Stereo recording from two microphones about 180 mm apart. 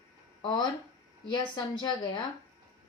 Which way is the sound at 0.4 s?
25° left (ahead or behind).